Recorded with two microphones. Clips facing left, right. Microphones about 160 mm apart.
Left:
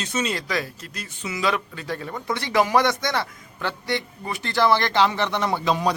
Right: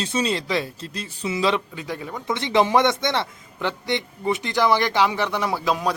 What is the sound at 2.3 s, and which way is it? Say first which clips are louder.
A man's voice: right 2 dB; 20° right (ahead or behind).